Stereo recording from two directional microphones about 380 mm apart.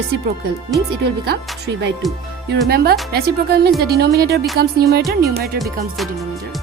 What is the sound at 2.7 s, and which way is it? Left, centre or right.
Speech, right.